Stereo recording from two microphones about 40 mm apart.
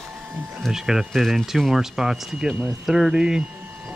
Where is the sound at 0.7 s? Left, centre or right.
Centre.